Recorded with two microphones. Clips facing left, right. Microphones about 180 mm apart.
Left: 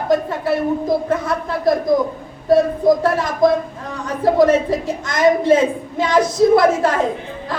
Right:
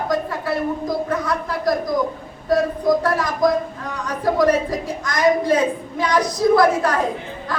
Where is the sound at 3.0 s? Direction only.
25° left (ahead or behind).